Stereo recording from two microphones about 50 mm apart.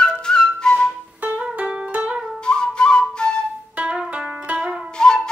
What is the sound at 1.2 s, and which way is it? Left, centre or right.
Music, right.